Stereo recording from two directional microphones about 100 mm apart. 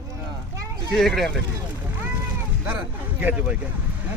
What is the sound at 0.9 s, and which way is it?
Speech, centre (ahead or behind).